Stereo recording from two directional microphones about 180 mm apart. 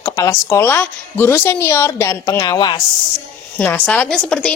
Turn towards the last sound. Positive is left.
turn(degrees=5)  # may be behind; listen again after turning